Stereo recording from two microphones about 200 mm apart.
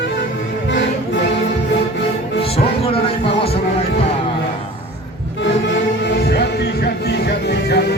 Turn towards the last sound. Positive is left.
turn(degrees=55)  # may be behind; listen again after turning